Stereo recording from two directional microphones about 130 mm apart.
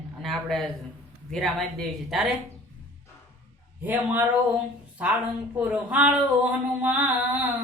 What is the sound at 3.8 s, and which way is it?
A woman's voice, 15° right (ahead or behind).